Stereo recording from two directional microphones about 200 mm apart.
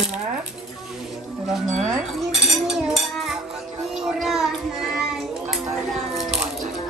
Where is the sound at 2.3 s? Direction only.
Centre (ahead or behind).